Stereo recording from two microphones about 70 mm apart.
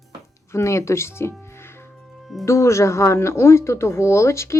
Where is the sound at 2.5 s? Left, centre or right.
Left.